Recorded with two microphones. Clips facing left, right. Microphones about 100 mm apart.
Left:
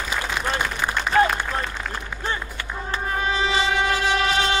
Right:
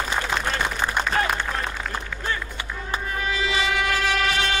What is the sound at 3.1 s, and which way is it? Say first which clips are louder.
Music: left 3 dB; 30° left (ahead or behind).